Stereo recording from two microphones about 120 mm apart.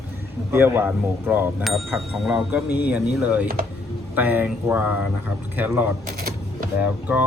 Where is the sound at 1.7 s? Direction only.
Centre (ahead or behind).